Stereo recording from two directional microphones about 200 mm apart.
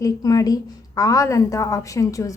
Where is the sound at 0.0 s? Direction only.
20° left (ahead or behind).